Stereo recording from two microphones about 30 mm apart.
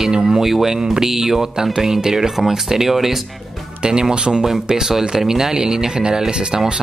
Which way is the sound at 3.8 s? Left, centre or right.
Right.